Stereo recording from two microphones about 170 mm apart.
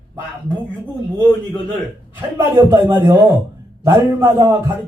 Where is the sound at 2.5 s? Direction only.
20° right (ahead or behind).